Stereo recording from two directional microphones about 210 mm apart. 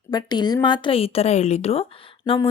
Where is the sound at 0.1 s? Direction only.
20° left (ahead or behind).